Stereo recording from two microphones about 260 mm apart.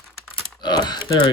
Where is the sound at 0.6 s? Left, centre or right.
Centre.